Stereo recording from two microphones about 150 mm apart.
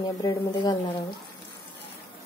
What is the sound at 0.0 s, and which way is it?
Speech, 25° left (ahead or behind).